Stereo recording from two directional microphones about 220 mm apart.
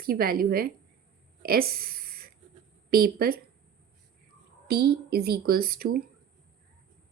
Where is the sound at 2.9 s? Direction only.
45° right (ahead or behind).